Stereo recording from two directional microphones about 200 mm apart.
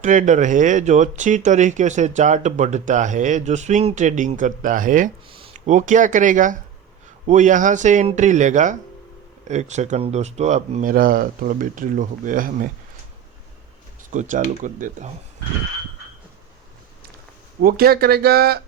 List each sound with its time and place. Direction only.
0.0 s speech: 40° right (ahead or behind)
14.1 s speech: 40° right (ahead or behind)
17.6 s speech: 50° right (ahead or behind)